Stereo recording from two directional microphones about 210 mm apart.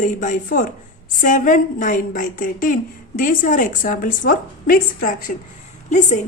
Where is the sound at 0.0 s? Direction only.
35° left (ahead or behind).